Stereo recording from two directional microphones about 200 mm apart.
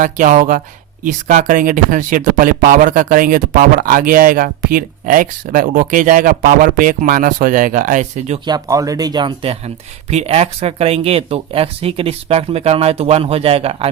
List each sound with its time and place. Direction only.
0.0 s speech: 40° right (ahead or behind)
8.4 s speech: 20° right (ahead or behind)